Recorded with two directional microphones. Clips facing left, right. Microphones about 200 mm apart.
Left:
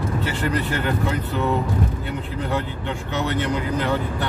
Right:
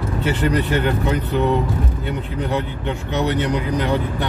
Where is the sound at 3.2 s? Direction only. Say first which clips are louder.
Right 3 dB; 15° right (ahead or behind).